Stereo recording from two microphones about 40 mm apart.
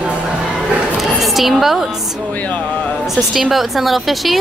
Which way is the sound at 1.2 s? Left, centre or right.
Centre.